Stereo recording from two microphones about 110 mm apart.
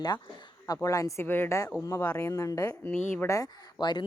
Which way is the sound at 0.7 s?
30° left (ahead or behind).